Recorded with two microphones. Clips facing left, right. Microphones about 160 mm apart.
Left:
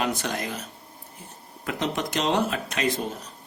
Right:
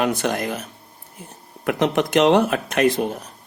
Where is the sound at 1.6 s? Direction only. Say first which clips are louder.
Right 8 dB; 60° right (ahead or behind).